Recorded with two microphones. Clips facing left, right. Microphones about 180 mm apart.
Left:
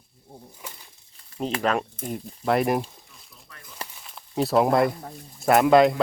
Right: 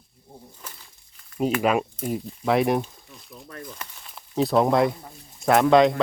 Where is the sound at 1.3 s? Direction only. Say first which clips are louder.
Right 5 dB; 30° left (ahead or behind).